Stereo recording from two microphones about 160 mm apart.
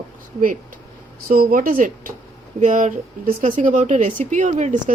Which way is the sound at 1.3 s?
65° right (ahead or behind).